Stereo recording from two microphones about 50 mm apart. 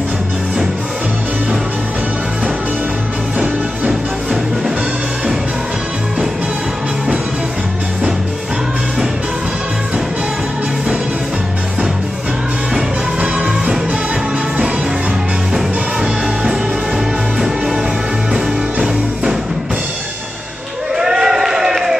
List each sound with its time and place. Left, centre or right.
3.3 s music: right
13.2 s music: right
15.5 s music: centre
18.3 s music: centre
20.9 s a sound: centre